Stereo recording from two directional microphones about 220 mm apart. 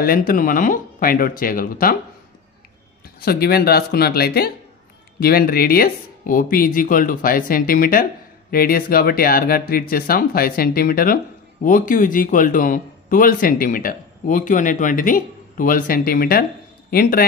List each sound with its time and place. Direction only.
0.0 s speech: 40° left (ahead or behind)
3.2 s speech: 45° left (ahead or behind)